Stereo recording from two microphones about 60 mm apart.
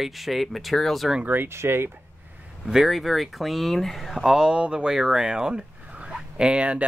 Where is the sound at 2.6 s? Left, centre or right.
Centre.